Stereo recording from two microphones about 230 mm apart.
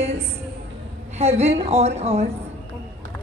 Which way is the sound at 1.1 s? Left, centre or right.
Right.